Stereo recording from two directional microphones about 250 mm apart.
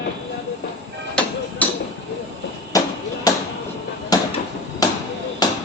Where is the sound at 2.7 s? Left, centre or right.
Centre.